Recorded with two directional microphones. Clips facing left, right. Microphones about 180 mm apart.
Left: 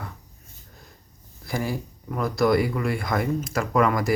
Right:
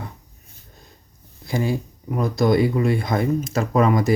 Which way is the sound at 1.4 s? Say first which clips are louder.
Right 5 dB; 20° right (ahead or behind).